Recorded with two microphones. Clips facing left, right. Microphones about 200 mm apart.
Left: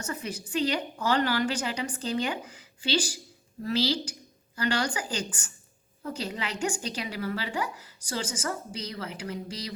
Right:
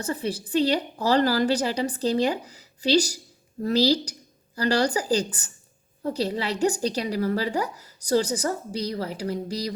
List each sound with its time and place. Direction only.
0.0 s a woman's voice: 35° right (ahead or behind)